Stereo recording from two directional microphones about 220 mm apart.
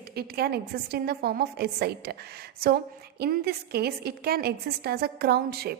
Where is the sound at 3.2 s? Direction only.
45° right (ahead or behind).